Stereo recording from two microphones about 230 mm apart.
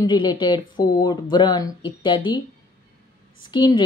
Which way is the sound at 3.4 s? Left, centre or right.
Centre.